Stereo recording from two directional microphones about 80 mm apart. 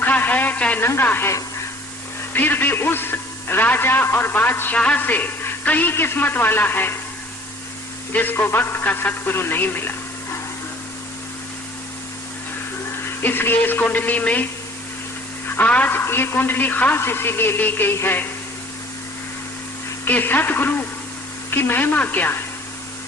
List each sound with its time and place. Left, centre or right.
0.0 s a man's voice: left
1.3 s speech: left
2.3 s a man's voice: left
8.1 s a man's voice: left
13.0 s a man's voice: left
15.6 s speech: centre
16.0 s a man's voice: left
20.1 s a man's voice: left